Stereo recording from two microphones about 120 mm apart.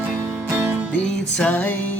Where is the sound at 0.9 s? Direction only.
10° left (ahead or behind).